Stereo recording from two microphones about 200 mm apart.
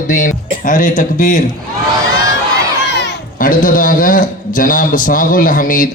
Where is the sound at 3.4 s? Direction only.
40° left (ahead or behind).